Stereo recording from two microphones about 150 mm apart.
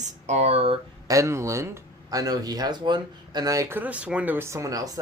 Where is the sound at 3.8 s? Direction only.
10° right (ahead or behind).